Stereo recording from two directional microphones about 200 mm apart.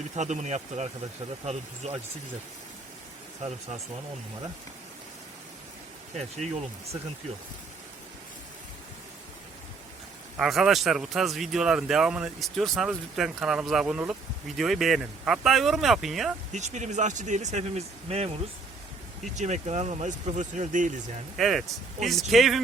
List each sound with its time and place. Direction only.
0.2 s speech: 35° right (ahead or behind)
6.1 s speech: 35° right (ahead or behind)
10.3 s speech: centre (ahead or behind)
16.5 s speech: 35° right (ahead or behind)
19.4 s speech: 35° right (ahead or behind)
21.3 s speech: centre (ahead or behind)